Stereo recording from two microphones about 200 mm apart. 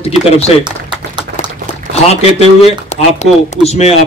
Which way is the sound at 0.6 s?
20° right (ahead or behind).